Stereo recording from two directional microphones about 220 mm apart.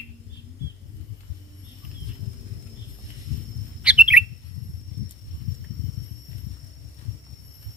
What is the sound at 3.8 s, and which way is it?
Bird, 5° right (ahead or behind).